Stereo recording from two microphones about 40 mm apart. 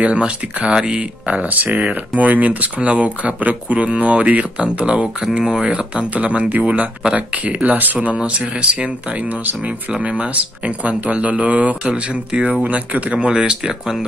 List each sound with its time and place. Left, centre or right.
0.0 s speech: right
1.2 s speech: right
5.4 s speech: centre
5.7 s speech: right
10.0 s speech: right
11.8 s speech: right
12.6 s speech: right
13.3 s speech: right